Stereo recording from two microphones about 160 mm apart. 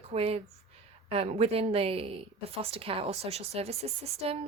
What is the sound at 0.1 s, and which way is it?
Speech, 40° right (ahead or behind).